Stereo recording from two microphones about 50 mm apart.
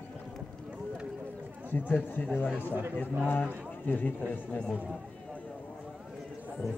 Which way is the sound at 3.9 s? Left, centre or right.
Left.